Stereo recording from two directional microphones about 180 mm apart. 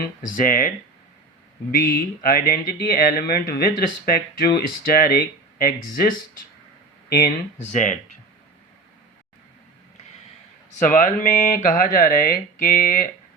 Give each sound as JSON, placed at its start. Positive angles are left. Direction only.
{"t": 0.2, "sound": "speech", "side_deg": 50}
{"t": 1.7, "sound": "speech", "side_deg": 55}
{"t": 10.8, "sound": "speech", "side_deg": 50}